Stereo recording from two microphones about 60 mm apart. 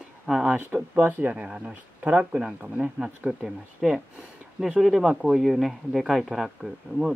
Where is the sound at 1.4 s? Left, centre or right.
Centre.